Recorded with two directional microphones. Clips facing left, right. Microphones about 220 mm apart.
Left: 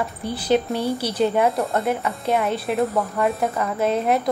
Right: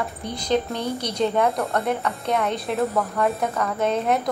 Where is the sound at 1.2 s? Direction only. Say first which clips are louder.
Left 2 dB; 5° left (ahead or behind).